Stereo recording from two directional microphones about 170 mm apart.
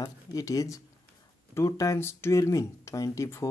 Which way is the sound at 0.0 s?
20° left (ahead or behind).